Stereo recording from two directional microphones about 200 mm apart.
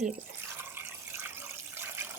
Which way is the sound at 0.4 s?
10° right (ahead or behind).